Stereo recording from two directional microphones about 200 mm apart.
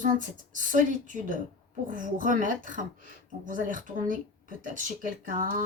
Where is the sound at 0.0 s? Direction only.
40° right (ahead or behind).